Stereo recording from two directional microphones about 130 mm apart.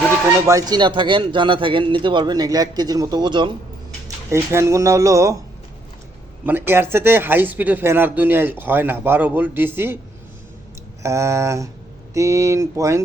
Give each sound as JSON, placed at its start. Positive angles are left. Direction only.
{"t": 0.4, "sound": "a man's voice", "side_deg": -30}
{"t": 4.3, "sound": "speech", "side_deg": -20}
{"t": 6.4, "sound": "speech", "side_deg": -15}
{"t": 11.0, "sound": "speech", "side_deg": -20}